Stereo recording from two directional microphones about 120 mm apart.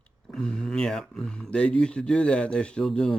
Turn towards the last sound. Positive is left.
turn(degrees=5)  # may be behind; listen again after turning